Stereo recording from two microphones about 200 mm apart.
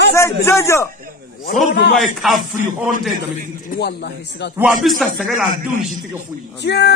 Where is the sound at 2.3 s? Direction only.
40° right (ahead or behind).